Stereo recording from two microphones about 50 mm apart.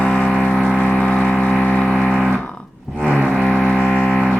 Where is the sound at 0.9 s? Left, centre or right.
Centre.